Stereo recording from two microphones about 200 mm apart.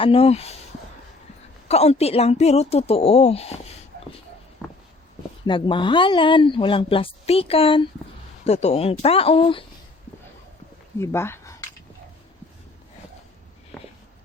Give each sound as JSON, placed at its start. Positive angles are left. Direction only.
{"t": 0.0, "sound": "speech", "side_deg": 30}
{"t": 1.6, "sound": "speech", "side_deg": 30}
{"t": 4.6, "sound": "a sound", "side_deg": 5}
{"t": 5.5, "sound": "speech", "side_deg": 25}
{"t": 11.0, "sound": "speech", "side_deg": 10}